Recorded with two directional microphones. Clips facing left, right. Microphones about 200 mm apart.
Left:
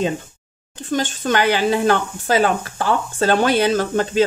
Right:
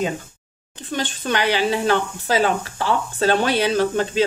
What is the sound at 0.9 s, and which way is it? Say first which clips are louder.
Speech: left 4 dB; 45° left (ahead or behind).